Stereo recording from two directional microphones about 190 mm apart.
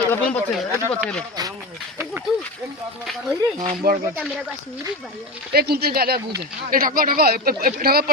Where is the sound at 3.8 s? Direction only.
50° right (ahead or behind).